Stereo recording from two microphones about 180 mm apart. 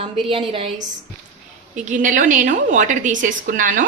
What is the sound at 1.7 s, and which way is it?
A woman's voice, 45° right (ahead or behind).